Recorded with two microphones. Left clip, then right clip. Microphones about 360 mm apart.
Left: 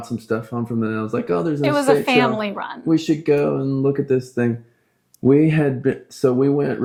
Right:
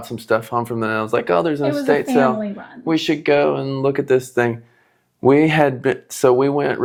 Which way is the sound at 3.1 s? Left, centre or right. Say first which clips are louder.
Right 5 dB; right.